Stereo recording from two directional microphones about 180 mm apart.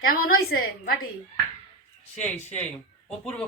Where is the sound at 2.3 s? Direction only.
10° left (ahead or behind).